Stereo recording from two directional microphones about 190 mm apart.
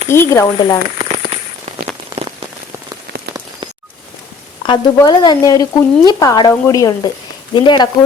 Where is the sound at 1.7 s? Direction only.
35° right (ahead or behind).